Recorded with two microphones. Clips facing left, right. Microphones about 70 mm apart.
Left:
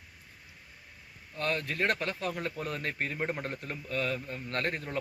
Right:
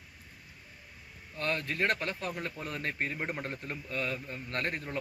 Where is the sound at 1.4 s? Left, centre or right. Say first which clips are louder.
Left 1 dB; right.